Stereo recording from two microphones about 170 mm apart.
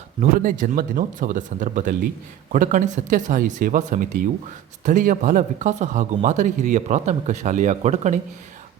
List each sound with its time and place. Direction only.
0.2 s speech: 50° right (ahead or behind)